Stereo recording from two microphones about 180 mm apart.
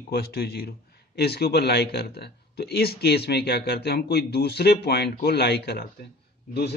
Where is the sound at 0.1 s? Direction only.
60° left (ahead or behind).